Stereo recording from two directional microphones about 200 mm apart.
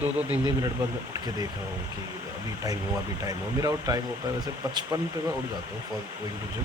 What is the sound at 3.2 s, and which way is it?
Speech, 15° right (ahead or behind).